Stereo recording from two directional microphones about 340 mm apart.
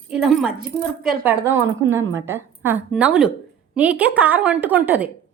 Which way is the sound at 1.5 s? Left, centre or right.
Right.